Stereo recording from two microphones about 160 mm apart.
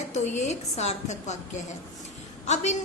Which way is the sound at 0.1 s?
45° left (ahead or behind).